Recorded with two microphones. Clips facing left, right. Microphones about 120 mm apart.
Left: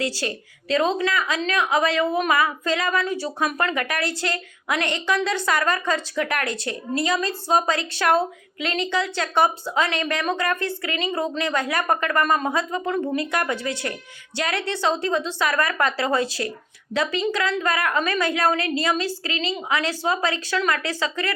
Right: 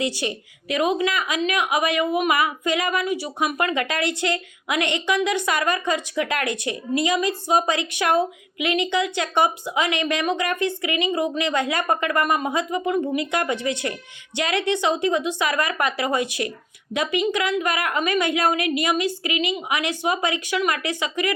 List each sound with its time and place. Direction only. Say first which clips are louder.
0.0 s a woman's voice: right 1 dB; 20° right (ahead or behind)